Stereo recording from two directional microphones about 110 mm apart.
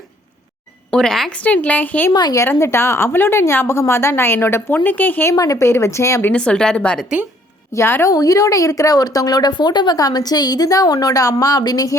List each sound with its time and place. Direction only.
0.9 s a woman's voice: 5° left (ahead or behind)
2.1 s a woman's voice: 40° left (ahead or behind)
2.4 s a woman's voice: 25° left (ahead or behind)
5.3 s a woman's voice: 30° left (ahead or behind)
6.3 s a woman's voice: 10° left (ahead or behind)
7.7 s a woman's voice: 25° left (ahead or behind)
8.1 s a woman's voice: 35° left (ahead or behind)